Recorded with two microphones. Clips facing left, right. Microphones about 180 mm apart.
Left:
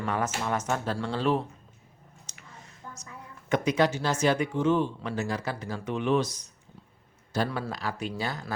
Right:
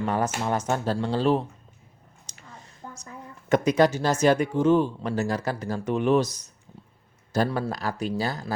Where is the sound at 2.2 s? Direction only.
35° right (ahead or behind).